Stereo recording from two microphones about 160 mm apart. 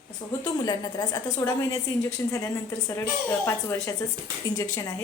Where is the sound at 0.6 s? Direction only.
25° left (ahead or behind).